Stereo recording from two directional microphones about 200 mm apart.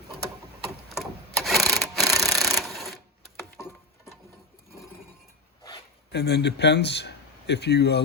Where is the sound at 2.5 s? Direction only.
Centre (ahead or behind).